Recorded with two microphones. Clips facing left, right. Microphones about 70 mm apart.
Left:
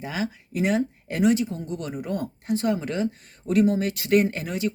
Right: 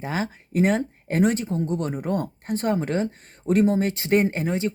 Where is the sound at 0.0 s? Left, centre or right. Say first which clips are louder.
Right 2 dB; right.